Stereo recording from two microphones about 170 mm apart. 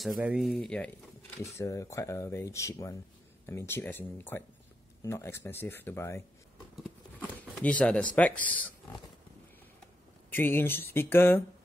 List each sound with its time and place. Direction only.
0.2 s speech: 5° right (ahead or behind)
0.5 s speech: 5° left (ahead or behind)
1.4 s speech: 20° left (ahead or behind)
6.8 s a sound: 5° left (ahead or behind)
8.2 s speech: 10° left (ahead or behind)
10.3 s speech: 15° left (ahead or behind)